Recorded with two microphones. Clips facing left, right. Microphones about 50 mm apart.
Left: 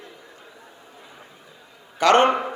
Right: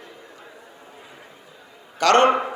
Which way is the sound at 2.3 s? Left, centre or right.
Right.